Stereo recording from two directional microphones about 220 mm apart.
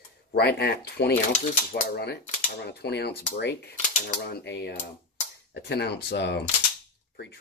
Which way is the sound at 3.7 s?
30° left (ahead or behind).